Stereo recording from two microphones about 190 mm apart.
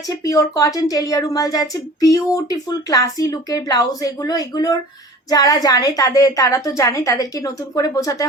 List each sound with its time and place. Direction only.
0.1 s a woman's voice: 20° left (ahead or behind)